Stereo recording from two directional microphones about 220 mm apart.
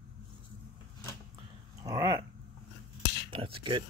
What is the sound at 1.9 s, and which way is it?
Dog, 15° right (ahead or behind).